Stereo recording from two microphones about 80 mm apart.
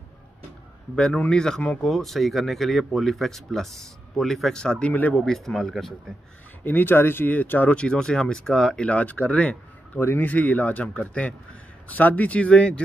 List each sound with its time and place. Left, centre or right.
0.9 s speech: centre
5.2 s speech: centre
6.6 s speech: left